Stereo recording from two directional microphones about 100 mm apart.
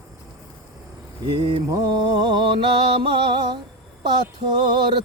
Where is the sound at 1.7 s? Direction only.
40° right (ahead or behind).